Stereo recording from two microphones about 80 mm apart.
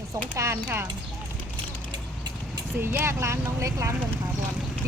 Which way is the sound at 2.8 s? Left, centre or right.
Right.